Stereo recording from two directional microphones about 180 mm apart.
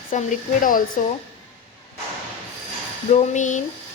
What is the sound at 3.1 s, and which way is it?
Speech, 40° left (ahead or behind).